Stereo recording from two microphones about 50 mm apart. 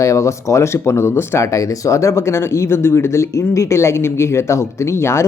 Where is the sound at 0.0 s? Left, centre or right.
Left.